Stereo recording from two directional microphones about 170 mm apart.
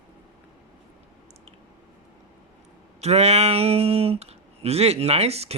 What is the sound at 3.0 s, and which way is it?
Speech, 40° right (ahead or behind).